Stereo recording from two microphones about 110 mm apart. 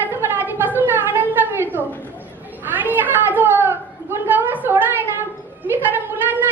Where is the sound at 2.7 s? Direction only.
15° right (ahead or behind).